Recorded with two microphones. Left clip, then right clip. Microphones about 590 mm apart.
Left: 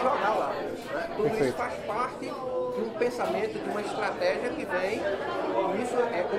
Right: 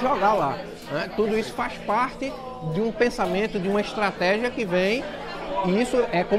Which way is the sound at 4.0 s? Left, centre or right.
Right.